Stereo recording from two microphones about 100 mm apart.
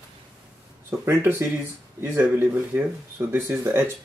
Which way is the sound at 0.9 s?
35° right (ahead or behind).